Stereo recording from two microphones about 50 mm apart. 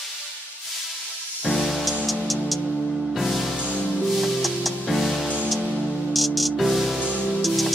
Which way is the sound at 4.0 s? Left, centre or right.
Centre.